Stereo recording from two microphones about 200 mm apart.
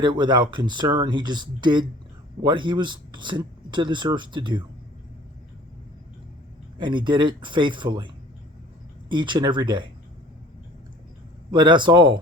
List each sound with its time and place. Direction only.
0.0 s speech: 20° right (ahead or behind)
6.7 s speech: 25° right (ahead or behind)
11.5 s speech: 25° right (ahead or behind)